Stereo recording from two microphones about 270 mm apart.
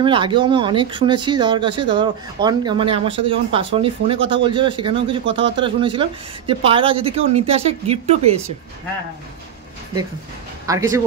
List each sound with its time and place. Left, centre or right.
0.0 s speech: centre
10.7 s speech: centre